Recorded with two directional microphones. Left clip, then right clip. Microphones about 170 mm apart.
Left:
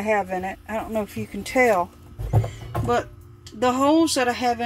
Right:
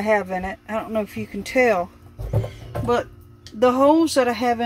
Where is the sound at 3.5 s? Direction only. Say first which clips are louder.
Right 3 dB; 20° right (ahead or behind).